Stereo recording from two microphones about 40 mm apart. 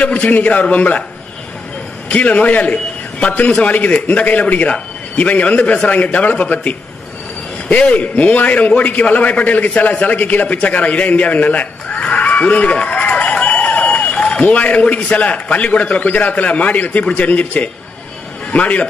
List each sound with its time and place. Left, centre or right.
0.0 s a man's voice: left
2.0 s a man's voice: left
12.7 s run: left
14.5 s a man's voice: left